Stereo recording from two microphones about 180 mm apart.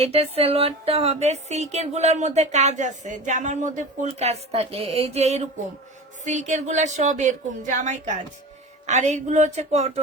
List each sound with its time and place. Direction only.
0.0 s speech: 35° right (ahead or behind)